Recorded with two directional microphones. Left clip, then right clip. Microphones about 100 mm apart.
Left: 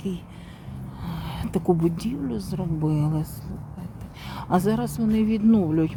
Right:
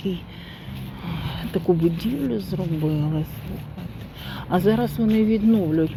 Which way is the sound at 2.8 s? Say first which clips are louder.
Even; 50° left (ahead or behind).